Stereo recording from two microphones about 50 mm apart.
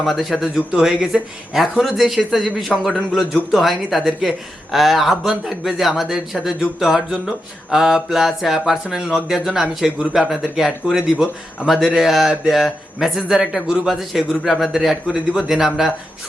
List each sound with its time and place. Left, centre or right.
0.0 s a man's voice: centre
1.5 s a man's voice: centre
13.2 s a man's voice: centre
15.1 s speech: centre
15.4 s speech: centre